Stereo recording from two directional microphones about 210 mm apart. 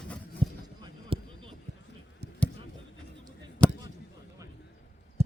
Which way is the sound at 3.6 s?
5° left (ahead or behind).